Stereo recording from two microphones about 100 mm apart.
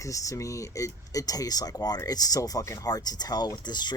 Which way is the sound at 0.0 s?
35° left (ahead or behind).